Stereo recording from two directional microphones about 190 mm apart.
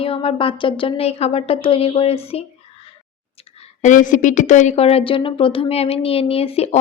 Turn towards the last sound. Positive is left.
turn(degrees=30)  # may be behind; listen again after turning